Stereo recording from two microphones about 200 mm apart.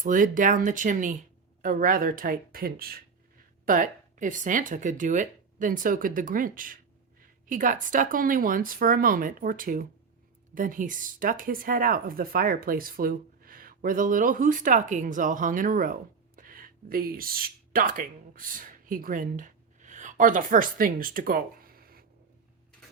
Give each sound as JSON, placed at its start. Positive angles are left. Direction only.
{"t": 0.0, "sound": "speech", "side_deg": -40}